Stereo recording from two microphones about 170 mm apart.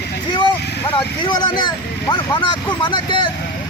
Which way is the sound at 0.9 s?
25° left (ahead or behind).